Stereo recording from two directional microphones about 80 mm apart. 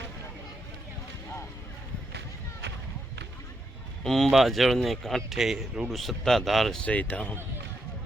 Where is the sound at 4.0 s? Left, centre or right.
Centre.